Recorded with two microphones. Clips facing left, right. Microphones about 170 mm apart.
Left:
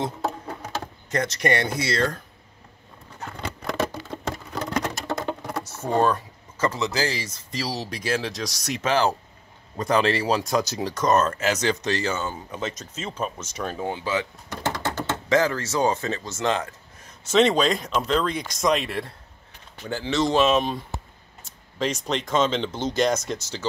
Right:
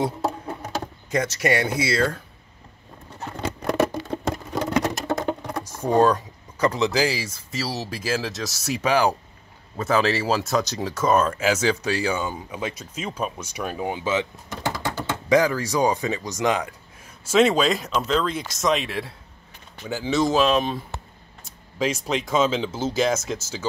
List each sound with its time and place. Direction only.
0.0 s a sound: 10° right (ahead or behind)
1.1 s speech: 5° right (ahead or behind)
3.6 s patter: 20° right (ahead or behind)
4.6 s patter: 10° right (ahead or behind)
5.5 s speech: 10° right (ahead or behind)
14.5 s typing: 10° right (ahead or behind)
15.0 s speech: 15° right (ahead or behind)